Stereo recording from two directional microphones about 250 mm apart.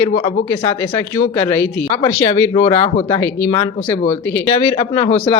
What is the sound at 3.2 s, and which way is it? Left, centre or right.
Speech, centre.